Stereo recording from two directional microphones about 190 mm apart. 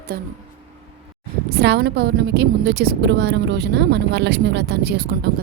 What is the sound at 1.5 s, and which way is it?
A woman's voice, 60° right (ahead or behind).